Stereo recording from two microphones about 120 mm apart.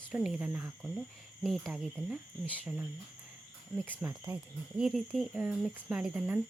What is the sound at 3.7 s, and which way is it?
Speech, 15° right (ahead or behind).